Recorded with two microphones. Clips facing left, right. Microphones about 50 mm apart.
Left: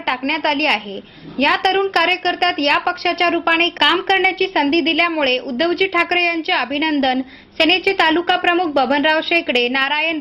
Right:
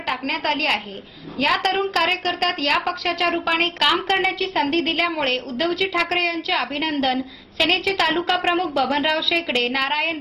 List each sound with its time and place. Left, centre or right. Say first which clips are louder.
0.0 s a woman's voice: left 5 dB; left
8.3 s a woman's voice: left 4 dB; left
8.7 s a woman's voice: left 5 dB; left